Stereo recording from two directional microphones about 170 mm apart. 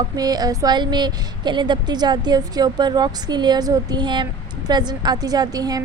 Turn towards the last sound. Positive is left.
turn(degrees=-20)  # may be behind; listen again after turning